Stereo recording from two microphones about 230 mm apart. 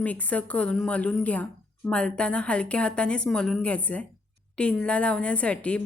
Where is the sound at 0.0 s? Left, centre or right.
Centre.